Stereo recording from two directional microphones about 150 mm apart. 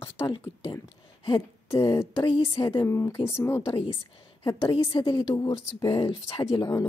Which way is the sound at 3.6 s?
40° left (ahead or behind).